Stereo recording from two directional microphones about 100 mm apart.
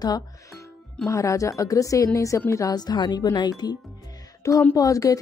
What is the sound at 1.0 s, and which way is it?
Speech, 30° left (ahead or behind).